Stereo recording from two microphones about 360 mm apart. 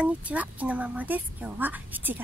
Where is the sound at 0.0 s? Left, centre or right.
Centre.